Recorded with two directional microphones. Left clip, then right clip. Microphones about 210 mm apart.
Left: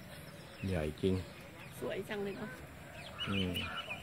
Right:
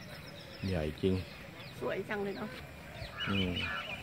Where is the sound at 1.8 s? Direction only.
15° right (ahead or behind).